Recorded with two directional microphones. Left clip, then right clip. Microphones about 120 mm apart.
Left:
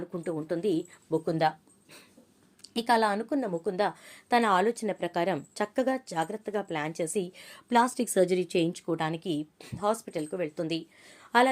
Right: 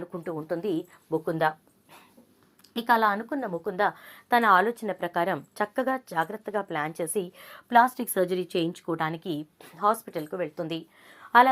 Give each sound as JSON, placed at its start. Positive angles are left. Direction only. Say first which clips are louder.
{"t": 0.1, "sound": "a woman's voice", "louder": "even", "side_deg": 25}
{"t": 8.4, "sound": "a woman's voice", "louder": "even", "side_deg": 15}